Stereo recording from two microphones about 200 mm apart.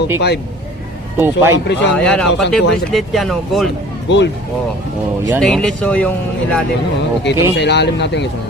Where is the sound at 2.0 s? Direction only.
5° left (ahead or behind).